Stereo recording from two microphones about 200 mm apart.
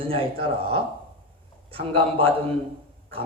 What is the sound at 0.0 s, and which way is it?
Speech, 30° right (ahead or behind).